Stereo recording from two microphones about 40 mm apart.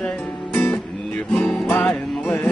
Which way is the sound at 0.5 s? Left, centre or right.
Left.